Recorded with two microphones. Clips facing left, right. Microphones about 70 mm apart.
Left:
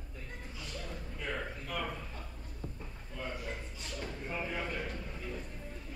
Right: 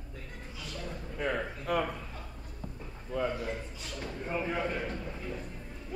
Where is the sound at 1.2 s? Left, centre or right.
Right.